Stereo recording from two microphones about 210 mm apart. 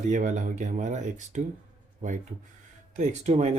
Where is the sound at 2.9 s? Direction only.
35° right (ahead or behind).